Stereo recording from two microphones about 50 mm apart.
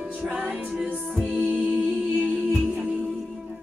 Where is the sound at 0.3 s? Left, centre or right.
Right.